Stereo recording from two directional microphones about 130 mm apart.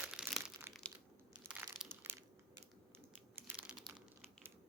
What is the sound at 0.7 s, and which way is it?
Crushing, 15° right (ahead or behind).